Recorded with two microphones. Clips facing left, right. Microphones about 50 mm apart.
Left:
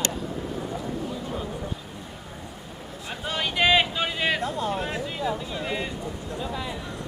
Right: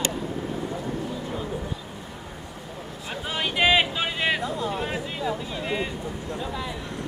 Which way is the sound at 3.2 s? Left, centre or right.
Centre.